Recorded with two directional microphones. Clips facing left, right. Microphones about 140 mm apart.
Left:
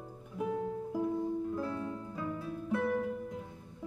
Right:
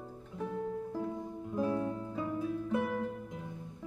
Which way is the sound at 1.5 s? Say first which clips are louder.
Right 4 dB; 20° right (ahead or behind).